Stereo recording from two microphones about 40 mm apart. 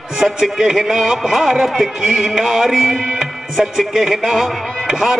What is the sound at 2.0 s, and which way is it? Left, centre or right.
Music, centre.